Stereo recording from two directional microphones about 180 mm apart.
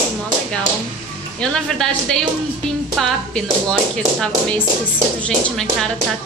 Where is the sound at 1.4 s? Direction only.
5° left (ahead or behind).